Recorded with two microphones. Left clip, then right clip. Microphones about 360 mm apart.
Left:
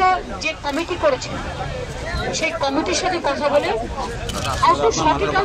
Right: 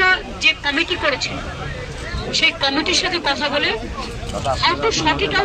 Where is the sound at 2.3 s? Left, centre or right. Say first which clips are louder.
Right 4 dB; centre.